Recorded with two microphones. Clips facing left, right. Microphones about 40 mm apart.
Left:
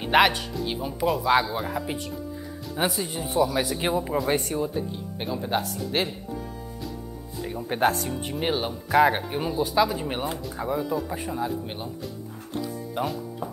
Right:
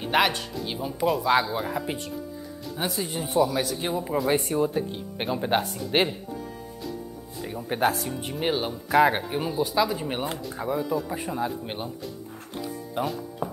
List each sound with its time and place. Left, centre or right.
0.0 s speech: centre
3.0 s speech: centre
4.7 s speech: right
7.5 s speech: centre
11.6 s speech: centre
12.9 s speech: centre